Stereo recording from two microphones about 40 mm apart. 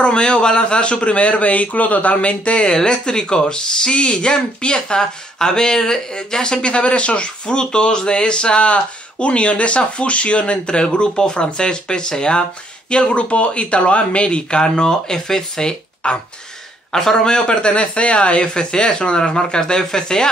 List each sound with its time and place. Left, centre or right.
0.0 s a man's voice: left